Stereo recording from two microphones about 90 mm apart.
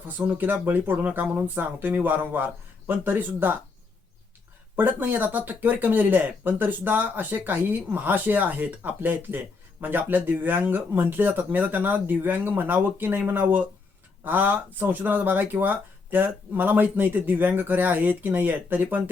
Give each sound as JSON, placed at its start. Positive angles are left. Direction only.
{"t": 0.3, "sound": "speech", "side_deg": -20}
{"t": 4.8, "sound": "speech", "side_deg": -20}